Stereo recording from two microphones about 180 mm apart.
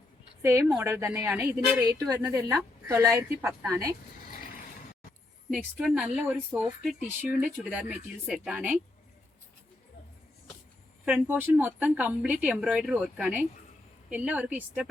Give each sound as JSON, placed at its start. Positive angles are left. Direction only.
{"t": 0.4, "sound": "speech", "side_deg": -15}
{"t": 5.5, "sound": "speech", "side_deg": -5}
{"t": 11.0, "sound": "speech", "side_deg": -10}